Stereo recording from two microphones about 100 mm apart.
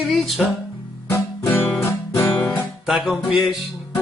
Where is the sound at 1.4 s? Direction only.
20° left (ahead or behind).